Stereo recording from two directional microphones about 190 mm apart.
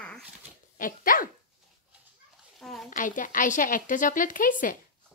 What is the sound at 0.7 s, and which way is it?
Dog, 45° left (ahead or behind).